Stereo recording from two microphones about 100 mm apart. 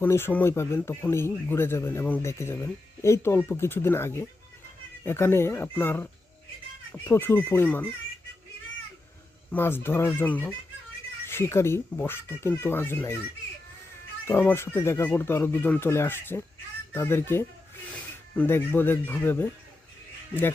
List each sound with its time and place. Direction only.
0.0 s speech: 20° left (ahead or behind)
9.5 s speech: 20° left (ahead or behind)
14.3 s speech: 25° left (ahead or behind)